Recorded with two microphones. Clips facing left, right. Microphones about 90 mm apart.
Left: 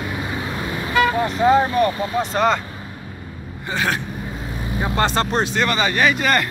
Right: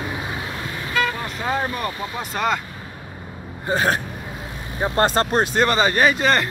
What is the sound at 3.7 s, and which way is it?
Speech, 40° right (ahead or behind).